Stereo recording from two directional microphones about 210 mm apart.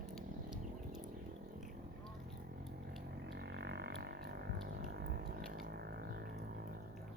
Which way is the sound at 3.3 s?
55° right (ahead or behind).